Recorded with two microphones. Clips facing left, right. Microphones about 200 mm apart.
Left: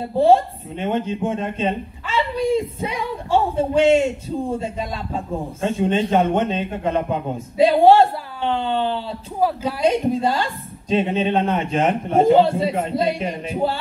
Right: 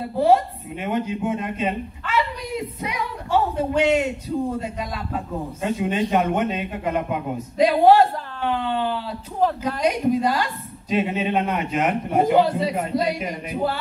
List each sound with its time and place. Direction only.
0.0 s speech: 25° left (ahead or behind)
9.4 s a woman's voice: 10° left (ahead or behind)
9.8 s speech: 25° left (ahead or behind)